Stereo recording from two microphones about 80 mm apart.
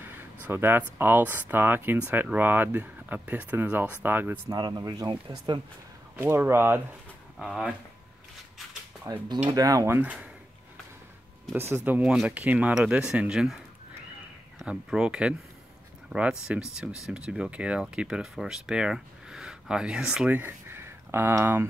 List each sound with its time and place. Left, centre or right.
0.0 s speech: right
4.5 s speech: right
6.1 s speech: right
7.3 s speech: centre
9.3 s speech: right
10.0 s speech: centre
11.5 s speech: right
12.0 s speech: centre
14.7 s speech: centre
20.3 s speech: right